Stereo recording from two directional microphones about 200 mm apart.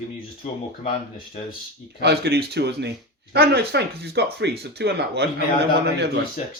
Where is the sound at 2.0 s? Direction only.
55° right (ahead or behind).